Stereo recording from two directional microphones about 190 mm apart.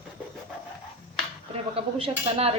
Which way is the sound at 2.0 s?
30° right (ahead or behind).